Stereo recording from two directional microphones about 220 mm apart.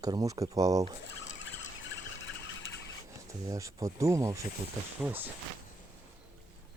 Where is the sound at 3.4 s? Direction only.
15° right (ahead or behind).